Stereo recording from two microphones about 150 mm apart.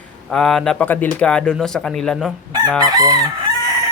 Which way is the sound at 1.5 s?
5° left (ahead or behind).